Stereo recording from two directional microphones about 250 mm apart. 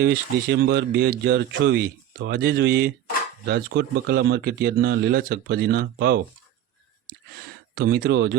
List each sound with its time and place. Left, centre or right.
0.0 s speech: right
7.3 s speech: right